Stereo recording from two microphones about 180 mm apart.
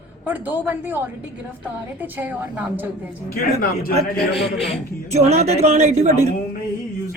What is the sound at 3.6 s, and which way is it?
Speech, 55° left (ahead or behind).